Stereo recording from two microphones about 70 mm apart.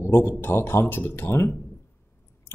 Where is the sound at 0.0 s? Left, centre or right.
Left.